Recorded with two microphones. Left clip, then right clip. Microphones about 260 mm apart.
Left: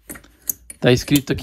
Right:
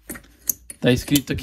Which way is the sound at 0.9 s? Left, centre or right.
Left.